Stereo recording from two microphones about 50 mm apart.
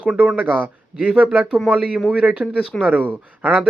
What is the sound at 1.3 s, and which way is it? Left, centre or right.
A man's voice, right.